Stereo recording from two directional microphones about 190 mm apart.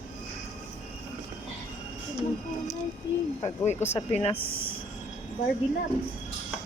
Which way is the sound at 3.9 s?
30° left (ahead or behind).